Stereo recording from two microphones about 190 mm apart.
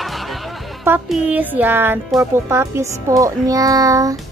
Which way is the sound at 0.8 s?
5° right (ahead or behind).